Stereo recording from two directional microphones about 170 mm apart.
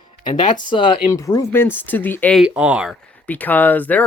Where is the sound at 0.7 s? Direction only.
30° left (ahead or behind).